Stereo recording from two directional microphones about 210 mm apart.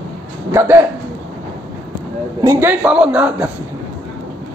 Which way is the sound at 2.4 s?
15° right (ahead or behind).